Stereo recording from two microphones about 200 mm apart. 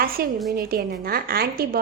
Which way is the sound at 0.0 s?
50° right (ahead or behind).